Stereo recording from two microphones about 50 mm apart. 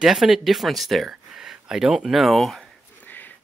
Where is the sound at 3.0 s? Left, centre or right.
Left.